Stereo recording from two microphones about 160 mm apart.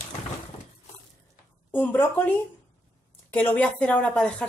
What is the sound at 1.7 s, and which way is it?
Speech, 10° left (ahead or behind).